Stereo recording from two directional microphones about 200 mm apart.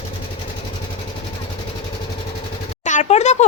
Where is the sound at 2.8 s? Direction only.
35° left (ahead or behind).